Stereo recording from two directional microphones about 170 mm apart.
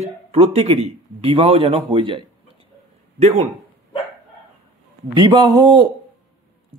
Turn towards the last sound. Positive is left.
turn(degrees=-25)  # may be behind; listen again after turning